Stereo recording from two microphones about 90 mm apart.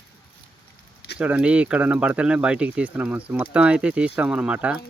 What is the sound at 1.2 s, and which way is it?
Speech, 15° right (ahead or behind).